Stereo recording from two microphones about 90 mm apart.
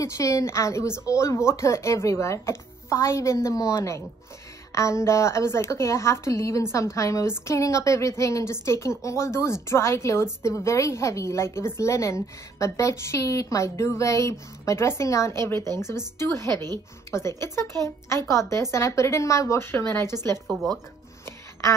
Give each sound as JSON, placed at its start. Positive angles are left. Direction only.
{"t": 0.0, "sound": "a woman's voice", "side_deg": 35}
{"t": 20.4, "sound": "speech", "side_deg": 0}
{"t": 21.3, "sound": "a sound", "side_deg": 30}